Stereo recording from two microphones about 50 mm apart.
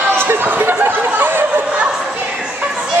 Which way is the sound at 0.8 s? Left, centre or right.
Right.